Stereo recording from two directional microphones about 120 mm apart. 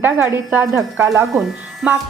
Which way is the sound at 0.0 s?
15° right (ahead or behind).